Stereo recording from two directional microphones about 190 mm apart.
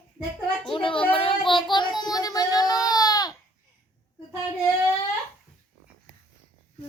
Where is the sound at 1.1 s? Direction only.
30° left (ahead or behind).